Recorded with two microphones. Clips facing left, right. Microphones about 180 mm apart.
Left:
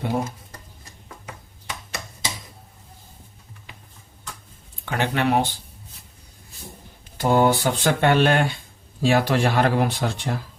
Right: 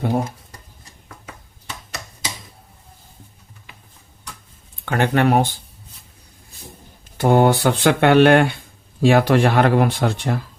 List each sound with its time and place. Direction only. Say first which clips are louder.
4.9 s speech: right 5 dB; 50° right (ahead or behind)
7.2 s speech: right 4 dB; 60° right (ahead or behind)